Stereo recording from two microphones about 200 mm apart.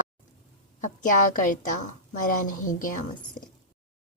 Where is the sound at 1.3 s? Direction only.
40° left (ahead or behind).